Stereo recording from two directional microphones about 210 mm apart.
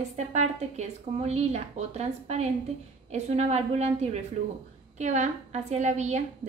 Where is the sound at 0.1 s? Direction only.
35° right (ahead or behind).